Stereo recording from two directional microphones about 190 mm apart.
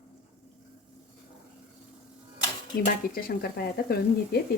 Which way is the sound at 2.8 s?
55° left (ahead or behind).